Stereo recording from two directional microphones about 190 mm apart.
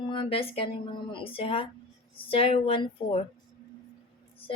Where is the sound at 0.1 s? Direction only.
30° left (ahead or behind).